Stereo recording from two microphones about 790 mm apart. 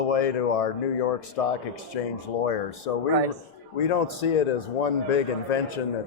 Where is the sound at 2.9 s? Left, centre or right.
Left.